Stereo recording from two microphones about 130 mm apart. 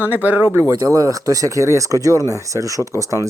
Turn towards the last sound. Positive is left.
turn(degrees=-25)  # may be behind; listen again after turning